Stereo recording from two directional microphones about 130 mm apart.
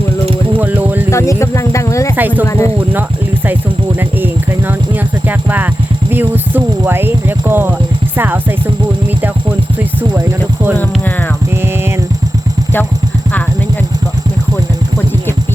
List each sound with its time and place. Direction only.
0.5 s music: 15° right (ahead or behind)
1.1 s a sound: 25° left (ahead or behind)
2.1 s speech: 15° right (ahead or behind)
2.5 s speech: 25° left (ahead or behind)
5.3 s a sound: 15° right (ahead or behind)
6.1 s speech: 15° right (ahead or behind)
10.0 s speech: 15° right (ahead or behind)